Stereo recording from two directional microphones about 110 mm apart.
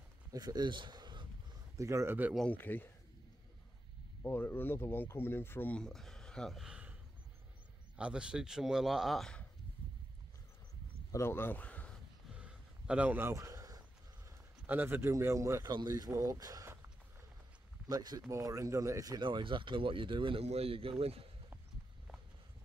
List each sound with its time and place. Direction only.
0.3 s speech: 35° right (ahead or behind)
1.8 s speech: 25° right (ahead or behind)
2.5 s speech: 15° left (ahead or behind)
4.2 s speech: 20° left (ahead or behind)
5.8 s speech: 5° left (ahead or behind)
7.9 s speech: 10° right (ahead or behind)
11.1 s speech: 25° left (ahead or behind)
12.4 s a sound: 10° right (ahead or behind); by 14.3 s 30° right (ahead or behind)
14.7 s speech: 20° right (ahead or behind)
15.7 s speech: 40° right (ahead or behind)
17.8 s speech: 35° right (ahead or behind); by 21.3 s 65° right (ahead or behind)